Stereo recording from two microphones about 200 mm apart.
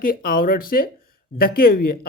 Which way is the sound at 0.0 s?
45° left (ahead or behind).